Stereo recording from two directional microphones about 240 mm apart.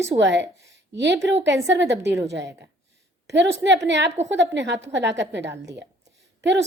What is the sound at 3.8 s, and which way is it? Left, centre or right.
A woman's voice, right.